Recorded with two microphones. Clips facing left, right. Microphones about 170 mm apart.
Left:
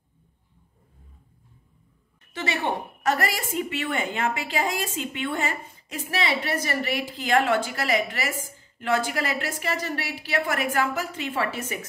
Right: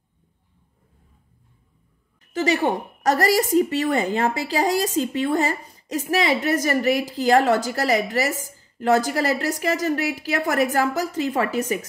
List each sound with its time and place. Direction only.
2.3 s a woman's voice: 40° right (ahead or behind)